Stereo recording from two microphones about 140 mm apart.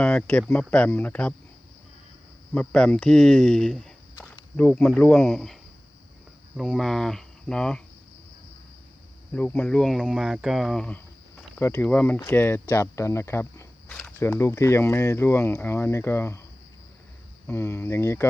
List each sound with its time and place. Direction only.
0.0 s speech: 10° left (ahead or behind)
2.6 s speech: 5° left (ahead or behind)
4.1 s speech: 20° left (ahead or behind); by 5.5 s centre (ahead or behind)
6.6 s speech: centre (ahead or behind)
9.3 s speech: 10° left (ahead or behind)
17.4 s speech: 15° left (ahead or behind)